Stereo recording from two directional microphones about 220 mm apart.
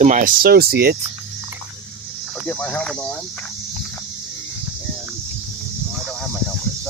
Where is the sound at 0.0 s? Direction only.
35° right (ahead or behind).